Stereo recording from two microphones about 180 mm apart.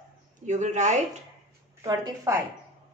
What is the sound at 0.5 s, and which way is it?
Speech, 40° right (ahead or behind).